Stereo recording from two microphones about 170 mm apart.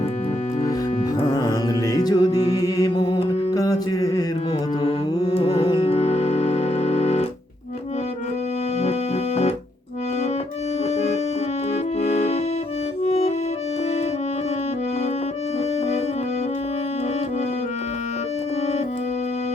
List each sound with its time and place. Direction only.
1.3 s music: 25° left (ahead or behind)
4.8 s music: 30° left (ahead or behind)
8.8 s music: 40° left (ahead or behind)
10.9 s music: 40° left (ahead or behind)
13.1 s accordion: 40° left (ahead or behind)